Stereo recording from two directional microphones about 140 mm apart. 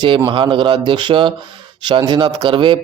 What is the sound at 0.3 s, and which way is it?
A man's voice, 35° right (ahead or behind).